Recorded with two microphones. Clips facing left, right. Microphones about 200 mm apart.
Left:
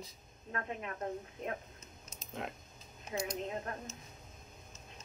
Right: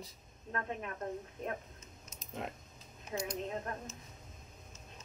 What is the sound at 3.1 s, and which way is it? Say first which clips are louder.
Speech: left 1 dB; 10° left (ahead or behind).